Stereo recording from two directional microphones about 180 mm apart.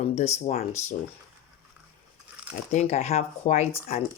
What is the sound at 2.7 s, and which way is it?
Speech, 40° left (ahead or behind).